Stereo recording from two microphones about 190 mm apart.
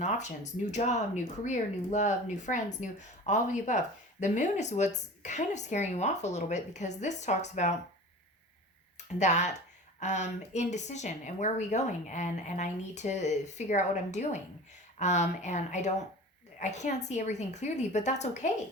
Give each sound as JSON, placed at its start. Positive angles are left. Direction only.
{"t": 0.0, "sound": "speech", "side_deg": 40}
{"t": 9.1, "sound": "speech", "side_deg": 40}